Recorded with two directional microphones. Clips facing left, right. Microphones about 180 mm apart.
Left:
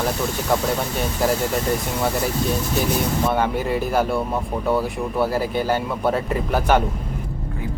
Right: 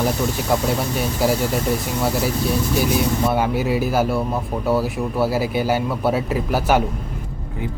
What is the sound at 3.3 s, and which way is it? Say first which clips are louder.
Speech: right 2 dB; 5° right (ahead or behind).